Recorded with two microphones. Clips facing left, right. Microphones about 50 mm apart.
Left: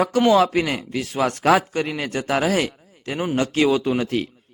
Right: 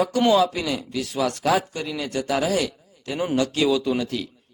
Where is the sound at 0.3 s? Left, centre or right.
Left.